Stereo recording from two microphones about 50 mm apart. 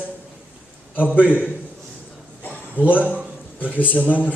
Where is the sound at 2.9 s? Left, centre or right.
Left.